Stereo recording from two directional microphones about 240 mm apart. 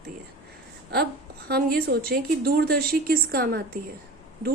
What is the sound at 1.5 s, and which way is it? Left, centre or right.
A woman's voice, right.